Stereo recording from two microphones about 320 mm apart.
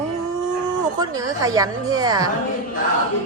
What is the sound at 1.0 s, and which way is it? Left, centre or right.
A woman's voice, centre.